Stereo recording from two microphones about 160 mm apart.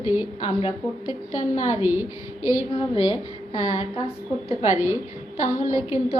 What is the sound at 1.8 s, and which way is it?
Speech, 15° right (ahead or behind).